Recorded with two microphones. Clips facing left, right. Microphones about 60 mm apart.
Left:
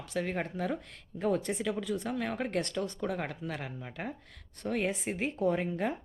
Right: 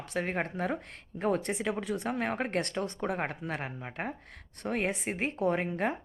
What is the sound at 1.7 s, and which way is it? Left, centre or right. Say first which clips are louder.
Speech: right 1 dB; right.